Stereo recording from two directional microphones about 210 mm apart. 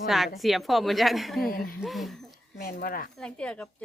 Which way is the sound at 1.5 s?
40° left (ahead or behind).